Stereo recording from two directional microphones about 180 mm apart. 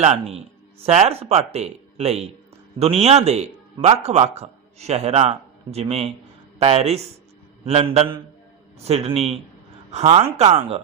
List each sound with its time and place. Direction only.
0.0 s a man's voice: 35° right (ahead or behind)